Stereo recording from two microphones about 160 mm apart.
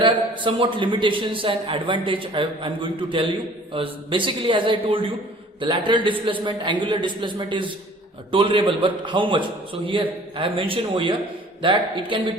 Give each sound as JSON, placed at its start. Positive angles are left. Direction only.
{"t": 0.0, "sound": "a man's voice", "side_deg": -30}